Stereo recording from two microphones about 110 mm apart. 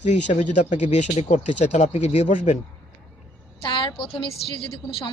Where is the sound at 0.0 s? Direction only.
90° left.